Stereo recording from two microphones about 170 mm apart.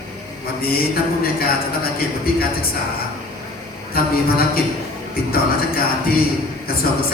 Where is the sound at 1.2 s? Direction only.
60° left (ahead or behind).